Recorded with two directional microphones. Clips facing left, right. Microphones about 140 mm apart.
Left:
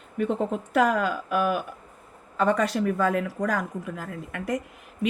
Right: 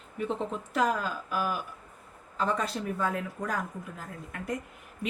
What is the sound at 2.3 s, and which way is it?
Speech, 75° left (ahead or behind).